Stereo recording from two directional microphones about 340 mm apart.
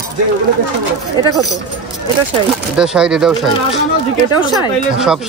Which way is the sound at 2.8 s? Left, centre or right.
Centre.